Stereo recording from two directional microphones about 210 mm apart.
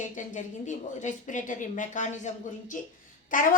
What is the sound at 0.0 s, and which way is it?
A woman's voice, 35° left (ahead or behind).